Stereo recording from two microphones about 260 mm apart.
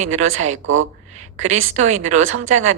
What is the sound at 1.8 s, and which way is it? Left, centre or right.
Speech, right.